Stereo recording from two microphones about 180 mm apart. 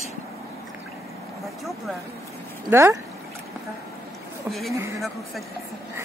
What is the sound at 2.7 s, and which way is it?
Speech, 15° right (ahead or behind).